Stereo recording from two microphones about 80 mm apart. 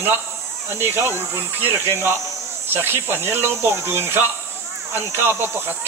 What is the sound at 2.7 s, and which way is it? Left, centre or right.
Speech, right.